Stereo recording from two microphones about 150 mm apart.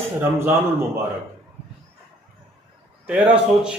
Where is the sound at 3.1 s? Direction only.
10° right (ahead or behind).